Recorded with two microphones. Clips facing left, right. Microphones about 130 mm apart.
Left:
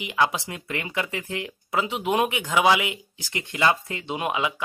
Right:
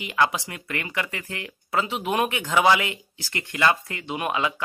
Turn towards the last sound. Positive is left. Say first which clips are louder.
# even
turn(degrees=15)  # may be behind; listen again after turning